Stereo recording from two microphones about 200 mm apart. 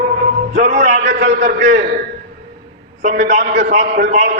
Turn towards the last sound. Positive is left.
turn(degrees=-45)  # may be behind; listen again after turning